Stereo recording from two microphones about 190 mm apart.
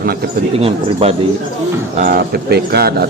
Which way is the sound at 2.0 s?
50° right (ahead or behind).